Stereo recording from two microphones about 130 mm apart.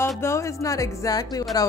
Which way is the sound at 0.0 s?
20° left (ahead or behind).